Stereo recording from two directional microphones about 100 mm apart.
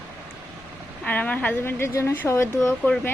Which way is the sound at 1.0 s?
15° left (ahead or behind).